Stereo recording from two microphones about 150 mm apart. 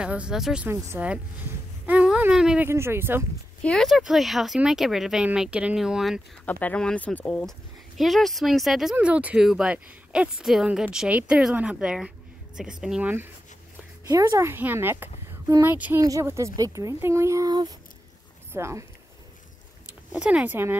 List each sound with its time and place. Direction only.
0.0 s speech: 5° right (ahead or behind)
2.7 s speech: 15° right (ahead or behind)
3.6 s speech: centre (ahead or behind)
6.4 s speech: 10° left (ahead or behind); by 13.3 s 10° right (ahead or behind)
14.0 s a woman's voice: 25° right (ahead or behind)
20.2 s speech: 5° right (ahead or behind)